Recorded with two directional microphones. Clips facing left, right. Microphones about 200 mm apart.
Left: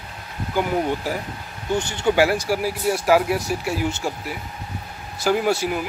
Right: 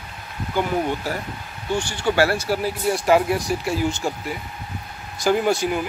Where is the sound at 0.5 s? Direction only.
15° left (ahead or behind).